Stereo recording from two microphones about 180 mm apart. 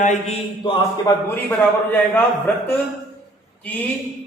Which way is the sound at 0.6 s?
25° left (ahead or behind).